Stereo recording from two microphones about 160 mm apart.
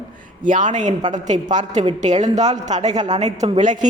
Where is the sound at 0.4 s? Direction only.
55° right (ahead or behind).